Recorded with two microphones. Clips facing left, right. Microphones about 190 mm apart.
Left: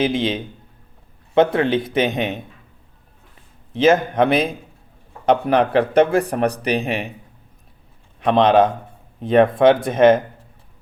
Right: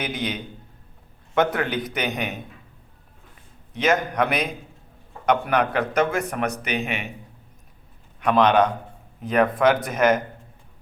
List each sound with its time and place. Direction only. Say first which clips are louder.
0.0 s speech: left 8 dB; 25° left (ahead or behind)
1.5 s speech: left 8 dB; 25° left (ahead or behind)
3.7 s a man's voice: left 7 dB; 30° left (ahead or behind)
8.2 s speech: left 4 dB; 25° left (ahead or behind)